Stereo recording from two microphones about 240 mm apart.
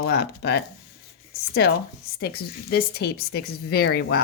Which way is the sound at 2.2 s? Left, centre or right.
Left.